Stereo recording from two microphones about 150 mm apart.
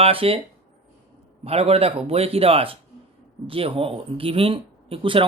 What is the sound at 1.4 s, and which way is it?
Speech, 45° right (ahead or behind).